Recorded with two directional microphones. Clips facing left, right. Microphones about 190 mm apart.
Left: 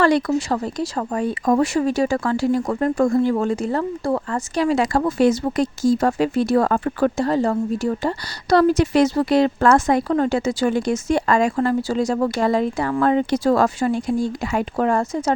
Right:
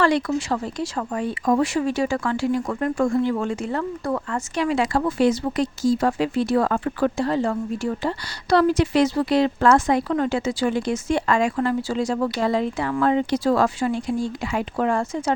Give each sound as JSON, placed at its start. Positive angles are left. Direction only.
{"t": 0.0, "sound": "speech", "side_deg": 40}